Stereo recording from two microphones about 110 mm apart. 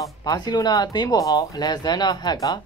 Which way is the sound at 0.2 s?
35° left (ahead or behind).